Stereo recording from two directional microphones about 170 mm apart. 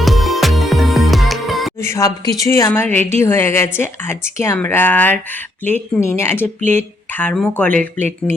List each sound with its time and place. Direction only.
0.0 s music: centre (ahead or behind)
1.8 s speech: 20° left (ahead or behind)